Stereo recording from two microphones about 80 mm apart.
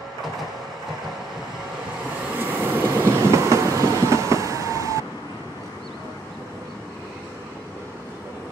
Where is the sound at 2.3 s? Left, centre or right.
Right.